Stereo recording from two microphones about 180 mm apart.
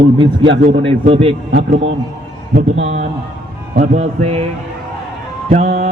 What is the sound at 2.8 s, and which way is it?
A man's voice, 40° right (ahead or behind).